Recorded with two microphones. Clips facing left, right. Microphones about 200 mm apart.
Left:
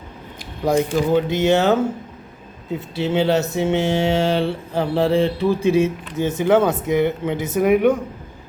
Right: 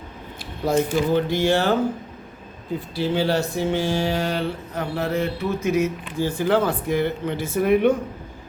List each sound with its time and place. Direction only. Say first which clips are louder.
0.6 s speech: left 2 dB; 15° left (ahead or behind)
2.7 s speech: left 3 dB; 25° left (ahead or behind)